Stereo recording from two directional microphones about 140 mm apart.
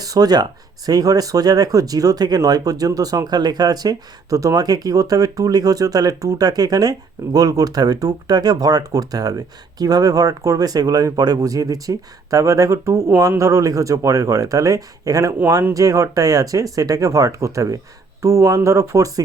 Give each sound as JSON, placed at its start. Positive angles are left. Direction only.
{"t": 0.0, "sound": "speech", "side_deg": -25}